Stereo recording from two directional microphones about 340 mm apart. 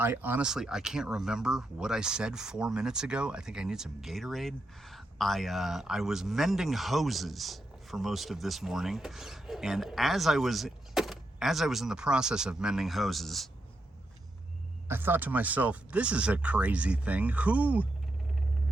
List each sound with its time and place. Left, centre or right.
0.0 s speech: centre
14.8 s speech: centre